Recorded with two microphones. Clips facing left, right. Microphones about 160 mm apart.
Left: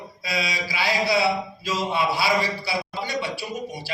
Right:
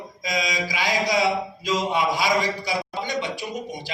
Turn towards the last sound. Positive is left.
turn(degrees=-20)  # may be behind; listen again after turning